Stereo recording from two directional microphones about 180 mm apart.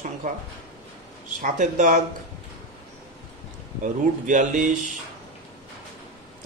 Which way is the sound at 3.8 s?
45° right (ahead or behind).